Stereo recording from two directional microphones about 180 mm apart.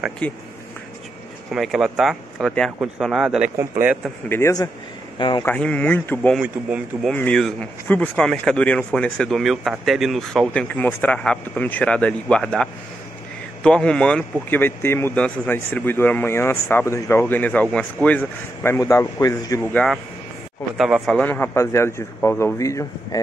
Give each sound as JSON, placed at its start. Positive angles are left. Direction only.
{"t": 0.2, "sound": "speech", "side_deg": 5}
{"t": 1.5, "sound": "speech", "side_deg": 0}
{"t": 4.3, "sound": "speech", "side_deg": 15}
{"t": 6.3, "sound": "speech", "side_deg": -5}